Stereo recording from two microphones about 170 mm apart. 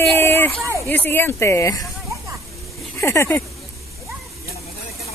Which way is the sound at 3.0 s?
15° left (ahead or behind).